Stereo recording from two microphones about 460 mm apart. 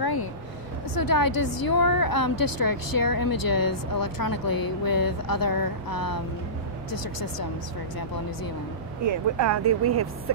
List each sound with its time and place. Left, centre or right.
0.0 s vehicle: left
1.0 s speech: left
9.1 s speech: right
9.7 s speech: right